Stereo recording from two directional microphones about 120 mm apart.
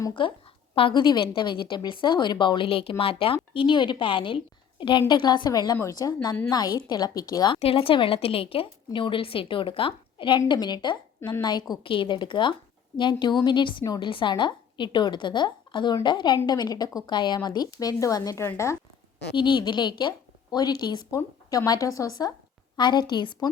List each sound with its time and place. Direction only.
0.2 s a woman's voice: 45° left (ahead or behind)
7.5 s a woman's voice: 50° left (ahead or behind)
11.2 s a woman's voice: 20° left (ahead or behind)
11.4 s a woman's voice: 35° left (ahead or behind)
13.8 s a woman's voice: 30° left (ahead or behind)
14.1 s a woman's voice: 45° left (ahead or behind); by 18.8 s 25° left (ahead or behind)
19.4 s a woman's voice: 40° left (ahead or behind)